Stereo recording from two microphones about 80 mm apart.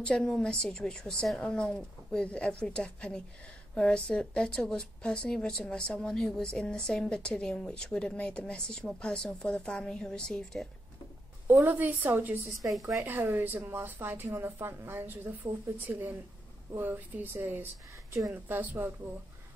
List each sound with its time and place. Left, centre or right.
0.0 s a woman's voice: centre
11.4 s speech: right